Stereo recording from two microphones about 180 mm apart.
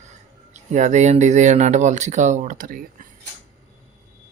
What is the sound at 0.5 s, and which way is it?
Speech, 40° right (ahead or behind).